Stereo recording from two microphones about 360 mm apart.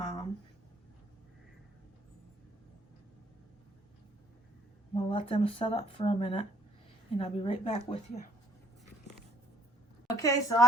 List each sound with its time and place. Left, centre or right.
0.0 s a sound: centre
4.9 s speech: centre
10.1 s a woman's voice: centre